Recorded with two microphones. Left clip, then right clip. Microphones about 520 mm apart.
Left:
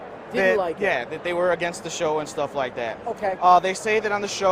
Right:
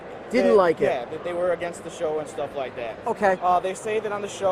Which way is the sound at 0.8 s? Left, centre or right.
Left.